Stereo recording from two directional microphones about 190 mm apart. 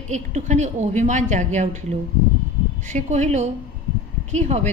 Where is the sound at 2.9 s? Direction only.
35° right (ahead or behind).